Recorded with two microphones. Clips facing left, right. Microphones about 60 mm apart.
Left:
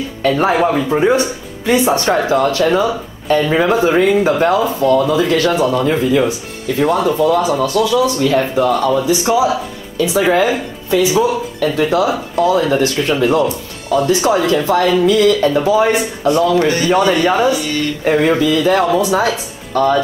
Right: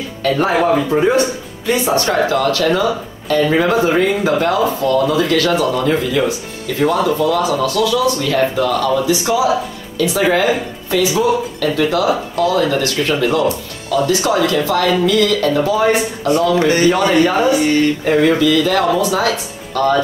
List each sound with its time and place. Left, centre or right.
0.4 s speech: centre
16.5 s speech: right
17.2 s speech: left
17.5 s speech: right
18.2 s speech: left